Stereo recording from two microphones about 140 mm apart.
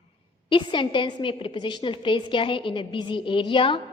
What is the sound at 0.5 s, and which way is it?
A woman's voice, 35° left (ahead or behind).